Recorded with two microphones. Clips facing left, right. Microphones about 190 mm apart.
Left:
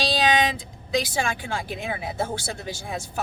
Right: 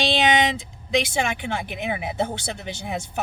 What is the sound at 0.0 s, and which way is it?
Speech, 25° right (ahead or behind).